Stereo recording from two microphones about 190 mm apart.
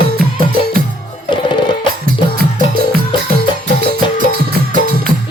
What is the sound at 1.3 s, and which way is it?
Music, 25° left (ahead or behind).